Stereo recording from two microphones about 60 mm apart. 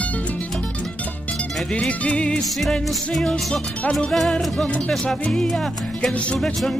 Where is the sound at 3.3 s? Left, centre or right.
Centre.